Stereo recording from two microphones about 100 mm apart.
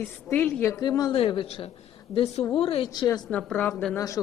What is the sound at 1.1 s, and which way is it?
Speech, 60° left (ahead or behind).